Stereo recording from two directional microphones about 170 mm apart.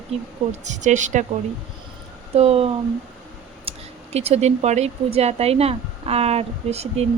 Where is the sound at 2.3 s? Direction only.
35° right (ahead or behind).